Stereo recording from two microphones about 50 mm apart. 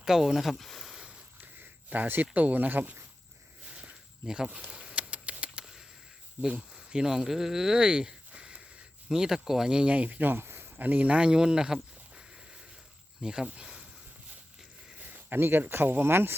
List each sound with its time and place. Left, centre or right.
0.0 s speech: centre
1.9 s speech: right
4.5 s patter: right
6.7 s speech: centre; by 10.7 s right
10.8 s a sound: right
13.2 s speech: centre
14.9 s a sound: right
15.4 s speech: right